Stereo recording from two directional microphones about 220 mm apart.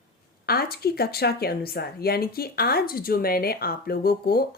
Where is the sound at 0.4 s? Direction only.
45° left (ahead or behind).